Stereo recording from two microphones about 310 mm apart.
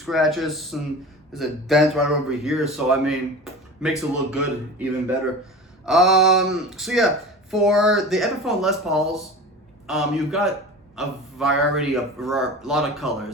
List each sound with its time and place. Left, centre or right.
0.0 s a man's voice: centre